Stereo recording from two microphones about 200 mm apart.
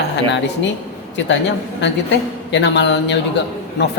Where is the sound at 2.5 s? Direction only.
65° left (ahead or behind).